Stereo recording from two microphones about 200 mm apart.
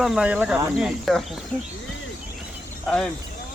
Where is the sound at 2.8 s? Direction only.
5° left (ahead or behind).